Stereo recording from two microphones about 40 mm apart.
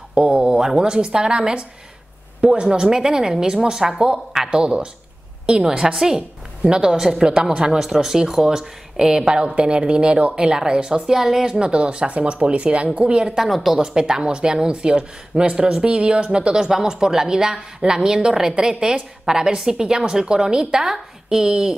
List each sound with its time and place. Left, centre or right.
0.1 s a woman's voice: right
13.4 s a woman's voice: centre
13.7 s a woman's voice: centre